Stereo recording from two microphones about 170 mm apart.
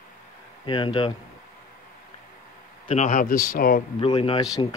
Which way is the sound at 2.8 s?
45° left (ahead or behind).